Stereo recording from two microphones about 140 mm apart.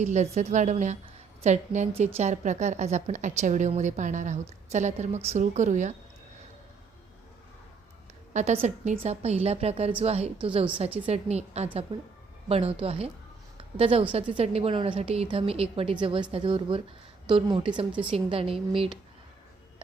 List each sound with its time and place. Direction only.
0.0 s a woman's voice: 55° right (ahead or behind)
8.3 s a woman's voice: 55° right (ahead or behind); by 18.9 s 40° right (ahead or behind)